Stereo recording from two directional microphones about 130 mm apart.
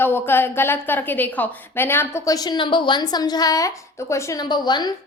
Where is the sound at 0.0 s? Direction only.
15° left (ahead or behind).